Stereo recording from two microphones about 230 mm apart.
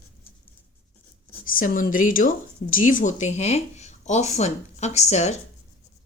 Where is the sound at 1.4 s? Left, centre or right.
Left.